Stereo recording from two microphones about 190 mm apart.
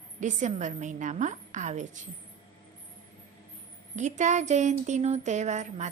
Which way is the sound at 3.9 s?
40° right (ahead or behind).